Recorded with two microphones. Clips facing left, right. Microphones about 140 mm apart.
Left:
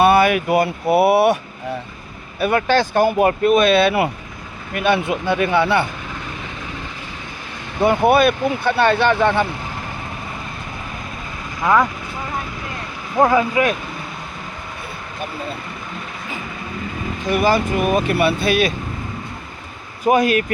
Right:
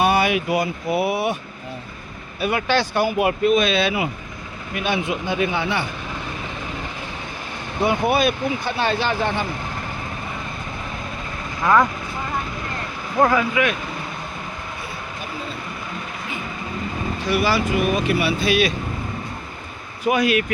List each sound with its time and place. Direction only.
0.0 s speech: 55° left (ahead or behind)
2.4 s speech: 50° left (ahead or behind); by 5.8 s 65° left (ahead or behind)
7.8 s speech: 55° left (ahead or behind)
11.6 s speech: 5° left (ahead or behind)
13.1 s speech: 15° left (ahead or behind)
13.5 s speech: 40° left (ahead or behind)
17.2 s speech: 50° left (ahead or behind)
20.1 s speech: 40° left (ahead or behind)